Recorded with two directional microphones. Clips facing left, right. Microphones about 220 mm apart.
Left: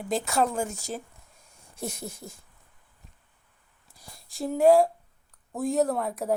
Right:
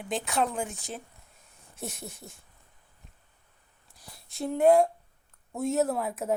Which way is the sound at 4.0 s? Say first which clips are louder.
Left 1 dB; centre (ahead or behind).